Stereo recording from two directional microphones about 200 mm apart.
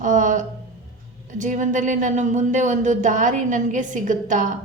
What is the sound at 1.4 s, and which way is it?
Speech, 40° right (ahead or behind).